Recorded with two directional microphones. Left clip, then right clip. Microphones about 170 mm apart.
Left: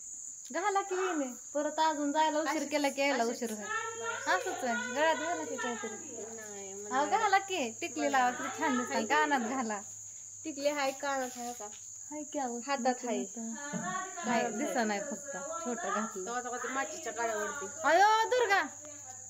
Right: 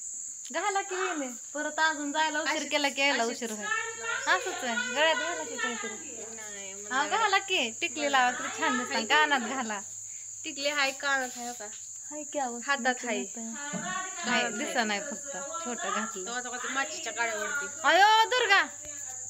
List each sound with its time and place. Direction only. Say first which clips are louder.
0.5 s speech: right 1 dB; 5° left (ahead or behind)
6.9 s speech: right 2 dB; 5° left (ahead or behind)
10.4 s speech: right 3 dB; 25° left (ahead or behind)
12.5 s speech: right 3 dB; 10° left (ahead or behind)
16.3 s speech: right 2 dB; 30° left (ahead or behind)
17.4 s speech: right 4 dB; 5° left (ahead or behind)